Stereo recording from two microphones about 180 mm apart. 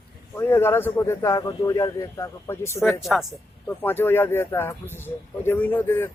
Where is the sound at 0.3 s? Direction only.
15° left (ahead or behind).